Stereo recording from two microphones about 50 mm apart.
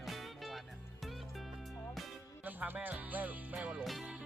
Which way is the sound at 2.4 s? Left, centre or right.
Right.